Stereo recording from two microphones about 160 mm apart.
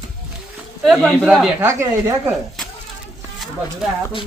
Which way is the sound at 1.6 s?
15° right (ahead or behind).